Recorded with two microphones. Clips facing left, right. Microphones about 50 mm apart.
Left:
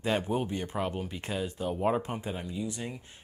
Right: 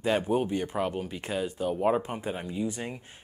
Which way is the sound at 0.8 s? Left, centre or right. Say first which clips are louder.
Right 3 dB; centre.